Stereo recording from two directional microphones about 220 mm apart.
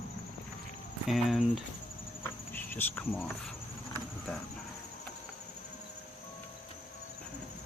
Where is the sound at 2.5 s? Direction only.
10° left (ahead or behind).